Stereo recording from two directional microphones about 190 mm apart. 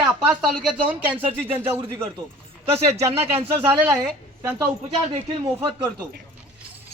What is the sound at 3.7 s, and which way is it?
Speech, 10° right (ahead or behind).